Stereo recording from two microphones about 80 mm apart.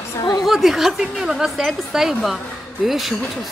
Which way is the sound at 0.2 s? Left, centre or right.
Left.